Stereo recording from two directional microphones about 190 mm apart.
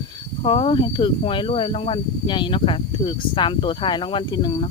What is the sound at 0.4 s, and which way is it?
Speech, 30° left (ahead or behind).